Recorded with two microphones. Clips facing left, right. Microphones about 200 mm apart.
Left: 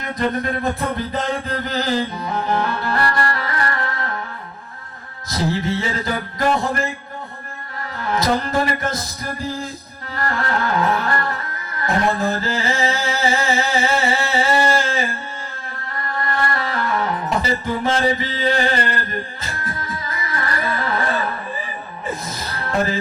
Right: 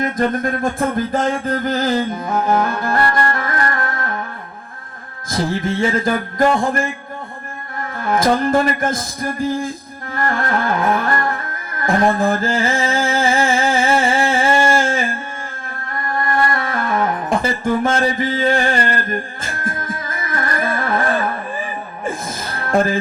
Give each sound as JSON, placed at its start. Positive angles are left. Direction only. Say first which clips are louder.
{"t": 0.0, "sound": "music", "louder": "right 4 dB", "side_deg": -45}
{"t": 5.3, "sound": "music", "louder": "right 1 dB", "side_deg": -50}
{"t": 7.9, "sound": "music", "louder": "right 4 dB", "side_deg": -50}
{"t": 10.2, "sound": "music", "louder": "right 3 dB", "side_deg": -50}
{"t": 11.8, "sound": "a sound", "louder": "right 4 dB", "side_deg": -50}
{"t": 16.1, "sound": "music", "louder": "right 4 dB", "side_deg": -50}